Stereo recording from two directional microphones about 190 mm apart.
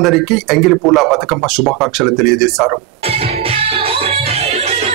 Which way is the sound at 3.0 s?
30° right (ahead or behind).